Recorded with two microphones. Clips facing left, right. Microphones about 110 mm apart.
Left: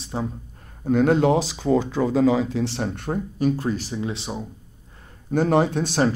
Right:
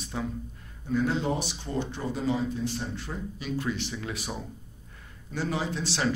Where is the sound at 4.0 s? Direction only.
25° left (ahead or behind).